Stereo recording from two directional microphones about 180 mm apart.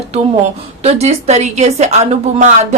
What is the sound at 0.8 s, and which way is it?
A woman's voice, 35° right (ahead or behind).